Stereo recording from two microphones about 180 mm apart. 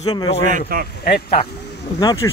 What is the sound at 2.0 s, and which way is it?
Speech, 20° left (ahead or behind).